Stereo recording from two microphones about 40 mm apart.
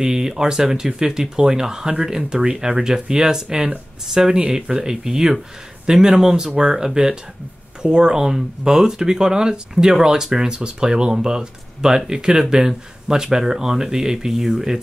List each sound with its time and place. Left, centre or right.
0.0 s speech: centre